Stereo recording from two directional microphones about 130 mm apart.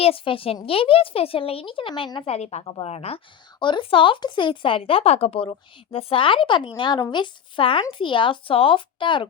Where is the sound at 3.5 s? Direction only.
40° left (ahead or behind).